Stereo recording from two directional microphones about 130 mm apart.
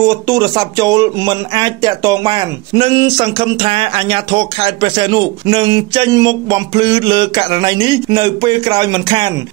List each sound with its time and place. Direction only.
0.0 s speech: 30° right (ahead or behind)